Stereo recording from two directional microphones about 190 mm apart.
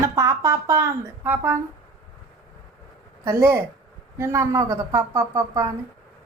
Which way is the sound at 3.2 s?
15° right (ahead or behind).